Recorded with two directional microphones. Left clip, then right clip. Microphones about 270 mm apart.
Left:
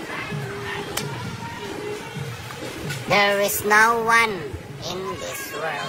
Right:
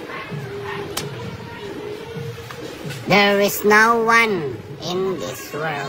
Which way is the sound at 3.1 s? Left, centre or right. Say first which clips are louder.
Right 3 dB; centre.